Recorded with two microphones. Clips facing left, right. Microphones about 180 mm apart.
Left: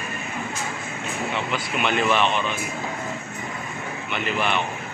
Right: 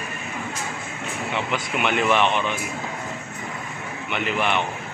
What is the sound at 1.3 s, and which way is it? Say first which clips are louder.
Speech: right 4 dB; 15° right (ahead or behind).